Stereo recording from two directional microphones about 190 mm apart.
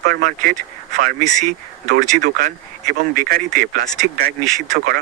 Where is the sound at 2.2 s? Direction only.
45° right (ahead or behind).